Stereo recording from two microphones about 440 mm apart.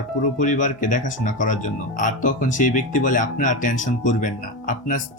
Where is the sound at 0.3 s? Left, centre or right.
Centre.